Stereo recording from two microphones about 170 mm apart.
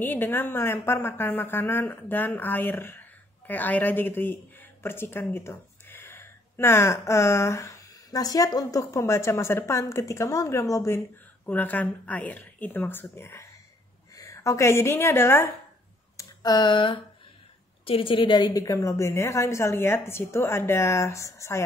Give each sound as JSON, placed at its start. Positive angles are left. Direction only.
{"t": 0.0, "sound": "a woman's voice", "side_deg": 10}
{"t": 16.2, "sound": "a sound", "side_deg": 25}
{"t": 17.8, "sound": "a woman's voice", "side_deg": 30}